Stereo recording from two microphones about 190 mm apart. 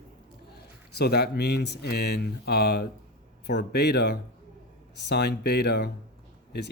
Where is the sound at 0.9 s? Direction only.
60° left (ahead or behind).